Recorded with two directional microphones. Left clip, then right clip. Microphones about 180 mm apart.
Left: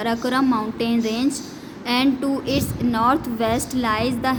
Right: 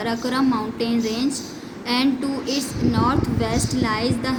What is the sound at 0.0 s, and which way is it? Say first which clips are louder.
A woman's voice: left 1 dB; 60° left (ahead or behind).